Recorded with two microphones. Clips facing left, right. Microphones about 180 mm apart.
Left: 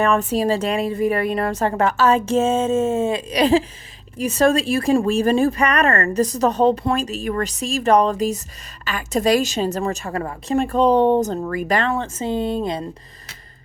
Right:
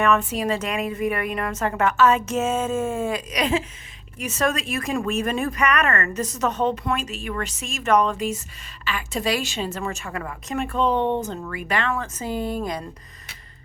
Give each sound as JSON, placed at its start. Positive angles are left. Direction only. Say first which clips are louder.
{"t": 0.0, "sound": "speech", "louder": "left 3 dB", "side_deg": 35}